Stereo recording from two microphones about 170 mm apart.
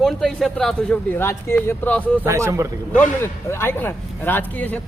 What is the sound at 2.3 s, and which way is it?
Speech, 15° right (ahead or behind).